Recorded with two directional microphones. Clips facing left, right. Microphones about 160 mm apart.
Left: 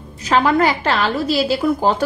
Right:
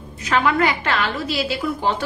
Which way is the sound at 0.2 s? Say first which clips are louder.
Left 4 dB; 35° left (ahead or behind).